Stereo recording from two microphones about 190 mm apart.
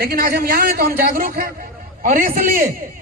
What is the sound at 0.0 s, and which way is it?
A man's voice, 50° right (ahead or behind).